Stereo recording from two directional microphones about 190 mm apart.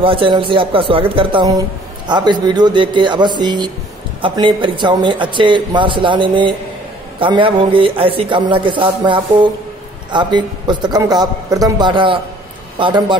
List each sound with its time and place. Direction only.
0.0 s speech: 30° right (ahead or behind)